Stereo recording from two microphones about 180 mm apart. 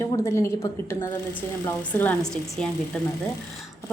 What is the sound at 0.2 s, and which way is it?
Speech, 15° left (ahead or behind).